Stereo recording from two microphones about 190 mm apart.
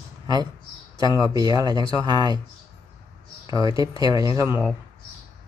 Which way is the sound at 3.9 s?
25° left (ahead or behind).